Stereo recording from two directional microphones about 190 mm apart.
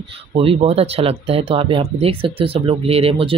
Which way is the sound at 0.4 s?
30° right (ahead or behind).